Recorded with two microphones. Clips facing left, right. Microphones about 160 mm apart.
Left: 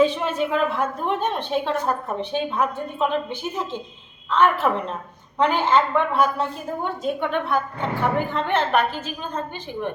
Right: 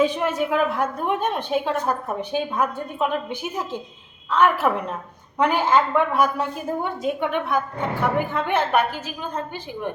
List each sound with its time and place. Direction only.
0.0 s a woman's voice: 10° right (ahead or behind)